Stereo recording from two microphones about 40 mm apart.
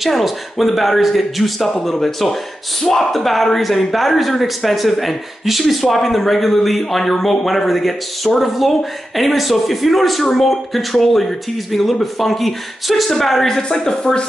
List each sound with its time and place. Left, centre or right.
0.0 s speech: centre
13.6 s speech: centre